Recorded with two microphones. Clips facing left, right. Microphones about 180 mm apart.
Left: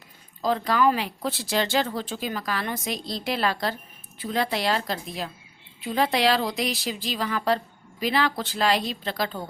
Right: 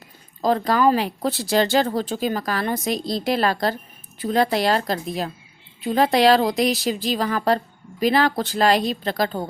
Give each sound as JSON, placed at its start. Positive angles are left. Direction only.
{"t": 0.4, "sound": "speech", "side_deg": -40}